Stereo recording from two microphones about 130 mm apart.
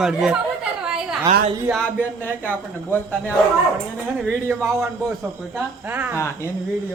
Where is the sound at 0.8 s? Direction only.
5° right (ahead or behind).